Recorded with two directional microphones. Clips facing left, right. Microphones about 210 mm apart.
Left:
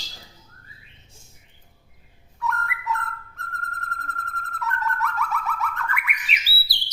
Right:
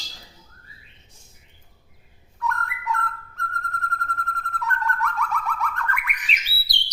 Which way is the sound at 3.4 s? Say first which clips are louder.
Right 7 dB; 5° left (ahead or behind).